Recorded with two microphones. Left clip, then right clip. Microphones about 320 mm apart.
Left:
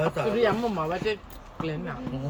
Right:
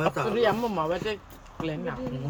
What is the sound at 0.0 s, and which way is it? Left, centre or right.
Speech, centre.